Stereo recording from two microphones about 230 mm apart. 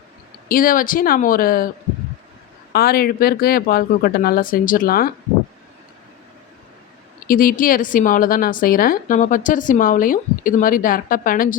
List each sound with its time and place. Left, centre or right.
0.4 s a woman's voice: left
2.7 s a woman's voice: left
7.3 s a woman's voice: left